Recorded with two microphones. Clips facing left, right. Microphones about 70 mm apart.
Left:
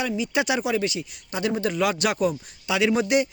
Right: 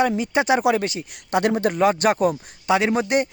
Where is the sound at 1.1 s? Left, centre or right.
Right.